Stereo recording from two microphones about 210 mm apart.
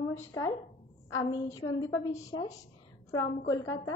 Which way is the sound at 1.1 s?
15° left (ahead or behind).